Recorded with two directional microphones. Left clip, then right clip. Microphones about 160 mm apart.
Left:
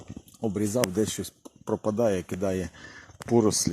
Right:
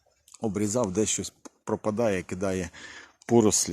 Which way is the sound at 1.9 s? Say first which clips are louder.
Left 1 dB; 20° right (ahead or behind).